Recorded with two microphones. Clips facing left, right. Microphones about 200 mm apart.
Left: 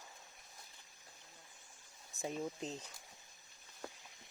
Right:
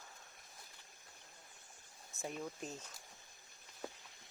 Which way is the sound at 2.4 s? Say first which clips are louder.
Left 3 dB; 20° left (ahead or behind).